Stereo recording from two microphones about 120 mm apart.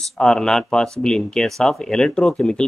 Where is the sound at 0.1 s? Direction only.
5° left (ahead or behind).